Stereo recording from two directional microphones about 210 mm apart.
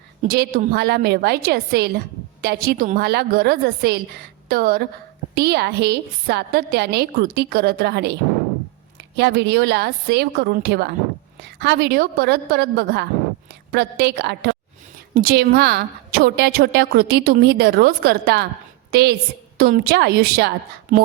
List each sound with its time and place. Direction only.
0.2 s a woman's voice: 45° right (ahead or behind)